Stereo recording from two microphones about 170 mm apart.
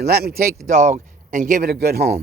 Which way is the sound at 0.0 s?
65° right (ahead or behind).